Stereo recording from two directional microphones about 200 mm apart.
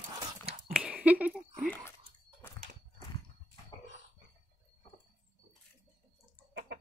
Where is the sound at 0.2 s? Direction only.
25° right (ahead or behind).